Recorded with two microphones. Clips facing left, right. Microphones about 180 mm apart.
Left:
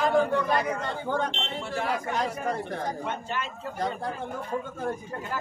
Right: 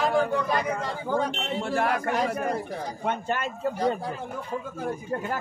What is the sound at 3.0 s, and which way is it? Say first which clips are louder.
Speech: right 4 dB; 50° right (ahead or behind).